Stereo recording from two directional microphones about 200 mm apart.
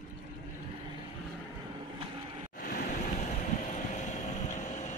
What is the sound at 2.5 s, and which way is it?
Vehicle, 40° left (ahead or behind).